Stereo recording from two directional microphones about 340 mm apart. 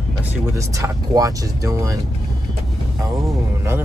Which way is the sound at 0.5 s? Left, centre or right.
Centre.